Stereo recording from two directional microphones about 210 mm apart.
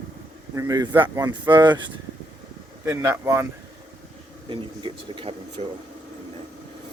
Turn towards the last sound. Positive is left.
turn(degrees=-30)  # may be behind; listen again after turning